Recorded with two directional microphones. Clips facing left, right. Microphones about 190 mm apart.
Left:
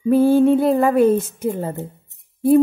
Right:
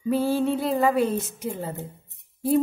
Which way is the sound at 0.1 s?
55° left (ahead or behind).